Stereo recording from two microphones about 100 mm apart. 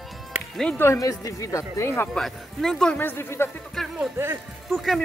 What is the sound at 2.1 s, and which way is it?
Speech, 5° left (ahead or behind).